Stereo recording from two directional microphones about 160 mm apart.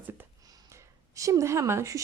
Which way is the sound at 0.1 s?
15° right (ahead or behind).